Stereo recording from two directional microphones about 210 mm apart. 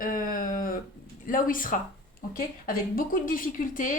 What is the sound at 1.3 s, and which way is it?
A woman's voice, 40° left (ahead or behind).